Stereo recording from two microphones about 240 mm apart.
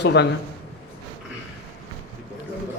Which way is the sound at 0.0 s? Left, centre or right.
Left.